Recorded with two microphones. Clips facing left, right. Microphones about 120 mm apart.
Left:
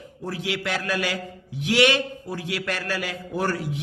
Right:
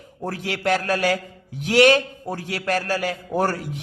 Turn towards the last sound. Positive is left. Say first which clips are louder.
# right 3 dB
turn(degrees=-45)  # may be behind; listen again after turning